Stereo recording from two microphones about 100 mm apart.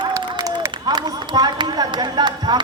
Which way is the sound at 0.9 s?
45° right (ahead or behind).